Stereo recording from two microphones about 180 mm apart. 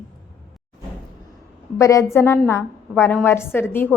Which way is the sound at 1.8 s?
15° left (ahead or behind).